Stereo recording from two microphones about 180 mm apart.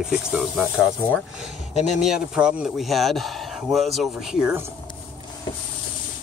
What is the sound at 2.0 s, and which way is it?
Speech, 5° right (ahead or behind).